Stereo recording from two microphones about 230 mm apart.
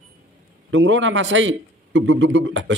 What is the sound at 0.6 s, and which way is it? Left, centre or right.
A man's voice, right.